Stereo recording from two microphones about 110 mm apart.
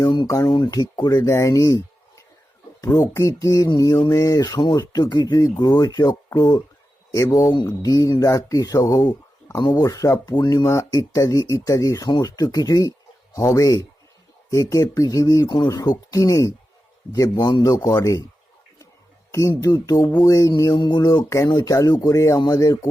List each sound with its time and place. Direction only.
0.3 s speech: 35° left (ahead or behind)
7.5 s speech: 40° left (ahead or behind)
19.3 s speech: 30° left (ahead or behind)